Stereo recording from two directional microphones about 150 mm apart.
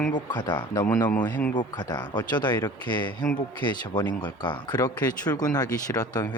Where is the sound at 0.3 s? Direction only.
30° left (ahead or behind).